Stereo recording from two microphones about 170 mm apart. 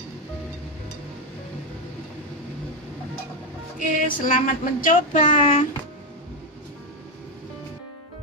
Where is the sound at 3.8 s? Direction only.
50° left (ahead or behind).